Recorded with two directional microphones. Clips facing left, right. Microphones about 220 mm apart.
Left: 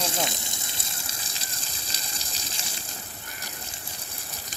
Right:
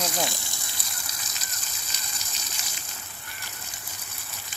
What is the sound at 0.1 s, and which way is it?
Gush, 20° left (ahead or behind).